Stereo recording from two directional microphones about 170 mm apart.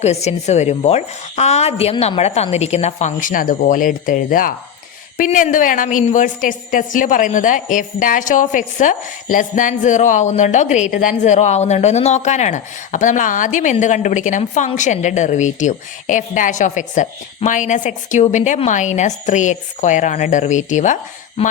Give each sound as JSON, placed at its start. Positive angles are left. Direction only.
{"t": 0.0, "sound": "a woman's voice", "side_deg": 40}